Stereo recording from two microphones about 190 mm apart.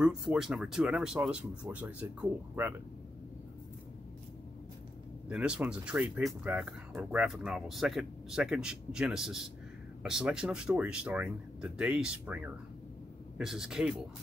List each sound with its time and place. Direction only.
0.0 s speech: centre (ahead or behind)
5.3 s speech: 5° right (ahead or behind)
13.4 s speech: 5° right (ahead or behind)